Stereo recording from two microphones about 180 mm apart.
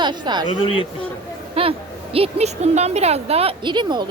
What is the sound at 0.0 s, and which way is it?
Speech, 25° right (ahead or behind).